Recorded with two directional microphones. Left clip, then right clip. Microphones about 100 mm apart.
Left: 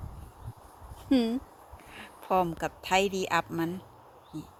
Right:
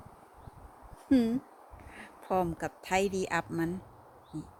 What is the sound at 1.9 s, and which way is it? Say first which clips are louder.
A woman's voice: left 4 dB; 25° right (ahead or behind).